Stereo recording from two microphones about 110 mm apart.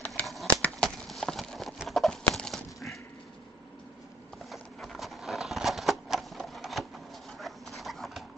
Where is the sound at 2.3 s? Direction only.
5° left (ahead or behind).